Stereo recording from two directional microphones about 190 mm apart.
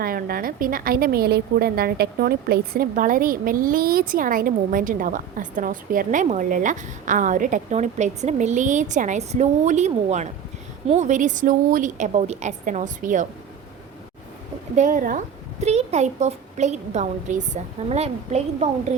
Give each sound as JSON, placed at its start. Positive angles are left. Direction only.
{"t": 0.0, "sound": "a woman's voice", "side_deg": -50}
{"t": 14.8, "sound": "a woman's voice", "side_deg": -45}